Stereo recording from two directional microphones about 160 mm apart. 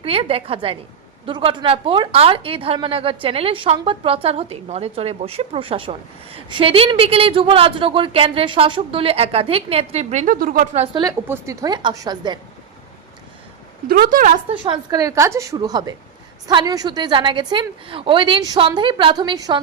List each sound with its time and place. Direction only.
0.0 s a woman's voice: 35° right (ahead or behind); by 10.7 s 60° right (ahead or behind)
11.3 s a woman's voice: 20° right (ahead or behind)
13.8 s a woman's voice: 65° right (ahead or behind)
14.6 s a woman's voice: 30° right (ahead or behind)